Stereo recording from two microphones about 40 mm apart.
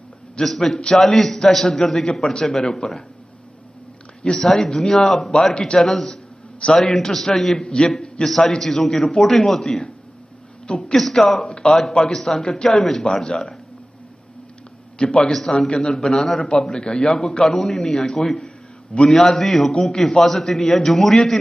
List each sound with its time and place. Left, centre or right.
0.4 s a man's voice: centre
4.2 s a man's voice: centre
5.3 s a man's voice: centre
11.5 s a man's voice: centre
13.0 s speech: centre
15.1 s a man's voice: centre
16.0 s a man's voice: centre
16.8 s a man's voice: centre
19.7 s a man's voice: left